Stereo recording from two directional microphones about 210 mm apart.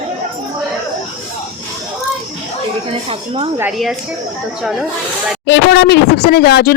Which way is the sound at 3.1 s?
25° right (ahead or behind).